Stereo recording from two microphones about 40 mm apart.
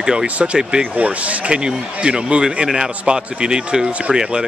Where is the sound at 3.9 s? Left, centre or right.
Right.